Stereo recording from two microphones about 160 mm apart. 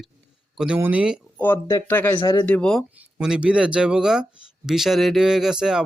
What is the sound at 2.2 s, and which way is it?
Speech, 30° left (ahead or behind).